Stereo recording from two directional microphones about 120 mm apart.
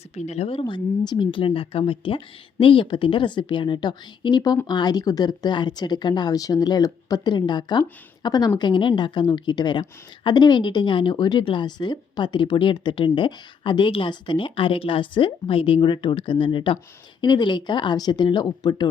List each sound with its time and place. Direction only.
0.2 s a woman's voice: 65° left (ahead or behind); by 18.9 s 35° left (ahead or behind)